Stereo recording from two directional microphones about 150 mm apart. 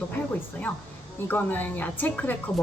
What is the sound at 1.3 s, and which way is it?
A woman's voice, 10° left (ahead or behind).